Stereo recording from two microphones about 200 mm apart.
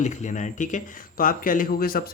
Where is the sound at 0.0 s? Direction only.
35° left (ahead or behind).